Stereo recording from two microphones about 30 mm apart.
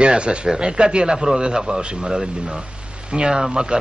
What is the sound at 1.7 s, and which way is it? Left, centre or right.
Speech, right.